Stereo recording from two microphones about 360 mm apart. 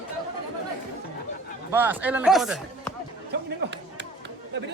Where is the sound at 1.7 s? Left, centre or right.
Centre.